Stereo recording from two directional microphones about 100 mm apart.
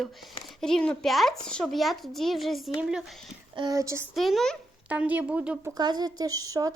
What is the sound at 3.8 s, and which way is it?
Speech, 30° right (ahead or behind).